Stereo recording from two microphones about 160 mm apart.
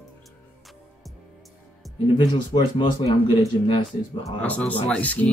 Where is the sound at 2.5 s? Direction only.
30° left (ahead or behind).